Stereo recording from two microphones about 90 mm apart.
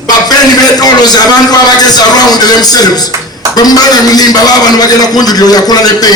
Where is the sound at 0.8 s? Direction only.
50° left (ahead or behind).